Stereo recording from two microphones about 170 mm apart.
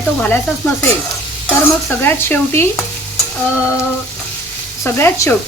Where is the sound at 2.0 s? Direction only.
15° left (ahead or behind).